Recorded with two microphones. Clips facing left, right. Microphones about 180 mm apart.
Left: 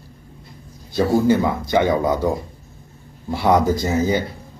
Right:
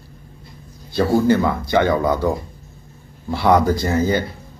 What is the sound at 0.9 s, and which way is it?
Speech, 15° left (ahead or behind).